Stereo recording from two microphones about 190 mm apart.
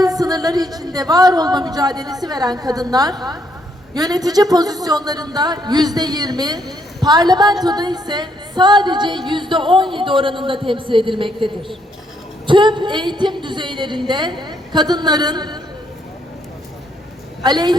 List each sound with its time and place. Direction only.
0.0 s music: 20° right (ahead or behind)
14.1 s a woman's voice: 25° right (ahead or behind)
17.4 s music: 20° right (ahead or behind)